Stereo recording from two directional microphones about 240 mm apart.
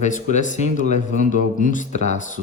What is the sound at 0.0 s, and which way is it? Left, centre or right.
Speech, left.